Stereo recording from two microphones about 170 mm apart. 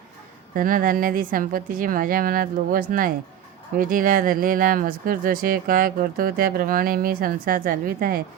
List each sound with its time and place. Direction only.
0.5 s speech: 55° right (ahead or behind)